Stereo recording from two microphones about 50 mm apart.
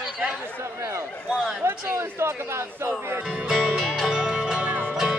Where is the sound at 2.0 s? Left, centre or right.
Right.